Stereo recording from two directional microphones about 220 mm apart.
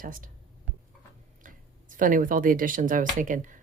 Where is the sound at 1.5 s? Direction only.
40° right (ahead or behind).